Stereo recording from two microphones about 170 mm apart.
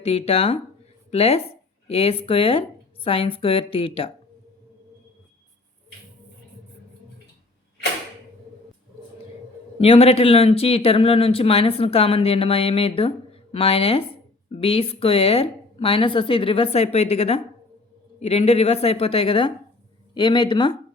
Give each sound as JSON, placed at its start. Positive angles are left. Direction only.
{"t": 0.0, "sound": "speech", "side_deg": 35}
{"t": 9.7, "sound": "speech", "side_deg": 35}